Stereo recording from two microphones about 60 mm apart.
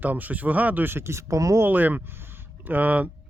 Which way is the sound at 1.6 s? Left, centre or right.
Right.